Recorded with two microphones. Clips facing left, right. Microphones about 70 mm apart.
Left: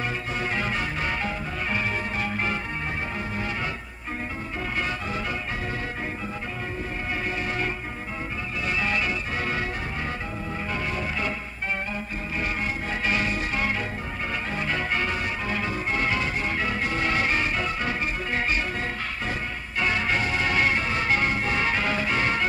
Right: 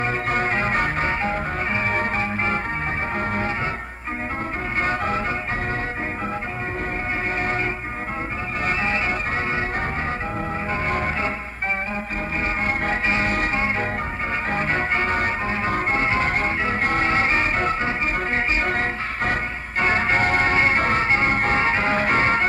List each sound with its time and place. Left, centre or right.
0.3 s music: right
4.8 s music: right
8.6 s music: right
13.0 s music: right
14.5 s music: right
16.3 s music: right
18.7 s music: right
19.8 s music: right